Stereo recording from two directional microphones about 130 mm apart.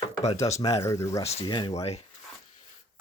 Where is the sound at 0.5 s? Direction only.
25° left (ahead or behind).